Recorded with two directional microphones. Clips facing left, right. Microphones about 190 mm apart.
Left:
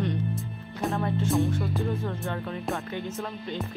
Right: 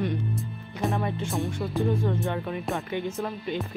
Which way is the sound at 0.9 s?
15° right (ahead or behind).